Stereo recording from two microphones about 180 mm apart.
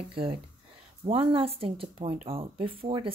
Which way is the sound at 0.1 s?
30° right (ahead or behind).